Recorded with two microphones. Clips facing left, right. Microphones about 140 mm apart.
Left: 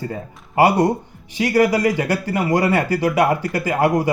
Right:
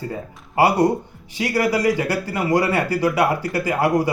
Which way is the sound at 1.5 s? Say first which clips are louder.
Left 2 dB; 45° left (ahead or behind).